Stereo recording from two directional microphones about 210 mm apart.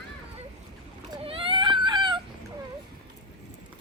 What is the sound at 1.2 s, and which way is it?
Baby cry, 25° right (ahead or behind).